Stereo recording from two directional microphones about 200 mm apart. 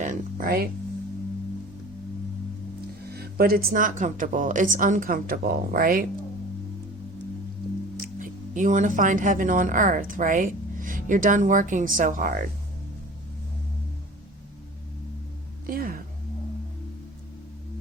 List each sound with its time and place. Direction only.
0.0 s music: 40° right (ahead or behind)
3.1 s speech: 50° right (ahead or behind)
7.9 s speech: 40° right (ahead or behind)
15.6 s music: 45° right (ahead or behind)